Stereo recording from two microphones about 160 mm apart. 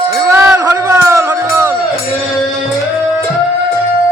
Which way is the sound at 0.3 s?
15° right (ahead or behind).